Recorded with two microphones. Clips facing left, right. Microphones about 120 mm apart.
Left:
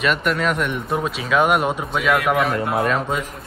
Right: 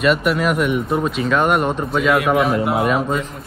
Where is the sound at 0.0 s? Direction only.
5° right (ahead or behind).